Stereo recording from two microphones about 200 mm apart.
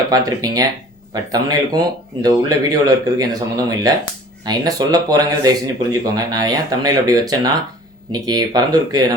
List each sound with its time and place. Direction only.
0.1 s speech: 20° right (ahead or behind)